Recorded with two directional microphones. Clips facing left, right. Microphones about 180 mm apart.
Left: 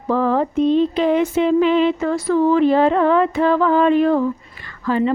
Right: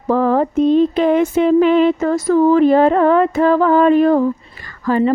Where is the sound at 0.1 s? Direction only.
45° right (ahead or behind).